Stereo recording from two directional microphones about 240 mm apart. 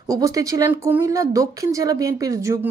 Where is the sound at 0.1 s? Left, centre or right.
Centre.